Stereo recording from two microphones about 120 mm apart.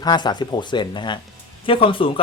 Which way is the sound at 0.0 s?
35° left (ahead or behind).